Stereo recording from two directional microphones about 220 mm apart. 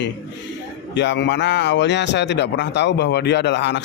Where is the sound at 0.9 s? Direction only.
55° left (ahead or behind).